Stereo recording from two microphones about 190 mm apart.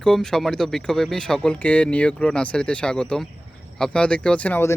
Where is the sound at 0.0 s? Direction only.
5° left (ahead or behind).